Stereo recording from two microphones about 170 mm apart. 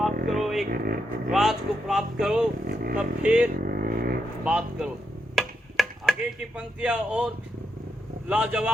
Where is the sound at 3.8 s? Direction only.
60° right (ahead or behind).